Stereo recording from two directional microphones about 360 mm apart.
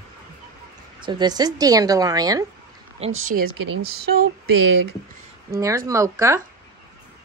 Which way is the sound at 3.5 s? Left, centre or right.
Right.